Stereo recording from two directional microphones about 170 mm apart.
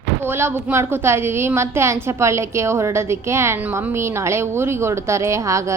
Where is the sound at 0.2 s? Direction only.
15° right (ahead or behind).